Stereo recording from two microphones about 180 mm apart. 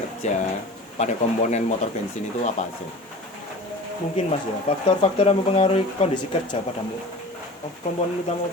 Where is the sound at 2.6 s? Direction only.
40° left (ahead or behind).